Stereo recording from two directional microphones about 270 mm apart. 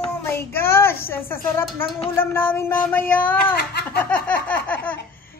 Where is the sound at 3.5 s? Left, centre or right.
Left.